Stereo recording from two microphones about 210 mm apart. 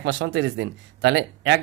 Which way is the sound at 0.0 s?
60° right (ahead or behind).